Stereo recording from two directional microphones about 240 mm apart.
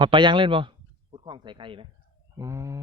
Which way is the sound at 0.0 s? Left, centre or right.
Centre.